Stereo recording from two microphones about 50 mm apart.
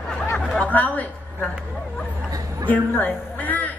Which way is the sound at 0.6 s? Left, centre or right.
Left.